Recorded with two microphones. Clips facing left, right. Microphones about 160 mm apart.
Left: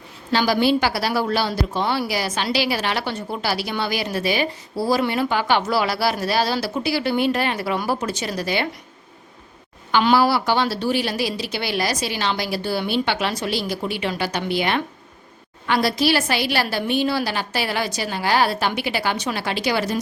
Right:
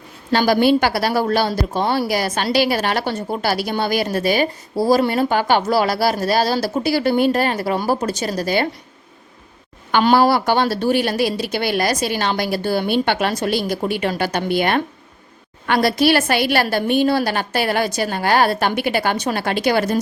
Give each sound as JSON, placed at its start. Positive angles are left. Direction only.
{"t": 0.3, "sound": "a woman's voice", "side_deg": -50}
{"t": 9.9, "sound": "a woman's voice", "side_deg": -50}